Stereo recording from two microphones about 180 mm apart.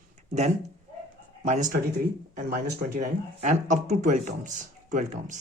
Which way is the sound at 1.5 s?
40° right (ahead or behind).